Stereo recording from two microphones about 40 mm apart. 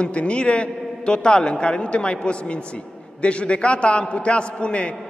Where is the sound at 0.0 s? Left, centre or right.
Left.